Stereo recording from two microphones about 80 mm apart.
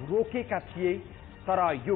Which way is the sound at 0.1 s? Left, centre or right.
Centre.